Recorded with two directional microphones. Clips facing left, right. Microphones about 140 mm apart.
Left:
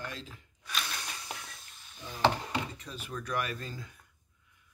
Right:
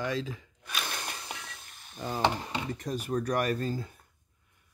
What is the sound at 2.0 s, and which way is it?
Speech, 75° right (ahead or behind).